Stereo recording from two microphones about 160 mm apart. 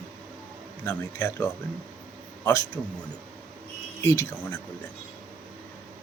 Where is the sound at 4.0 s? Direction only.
20° left (ahead or behind).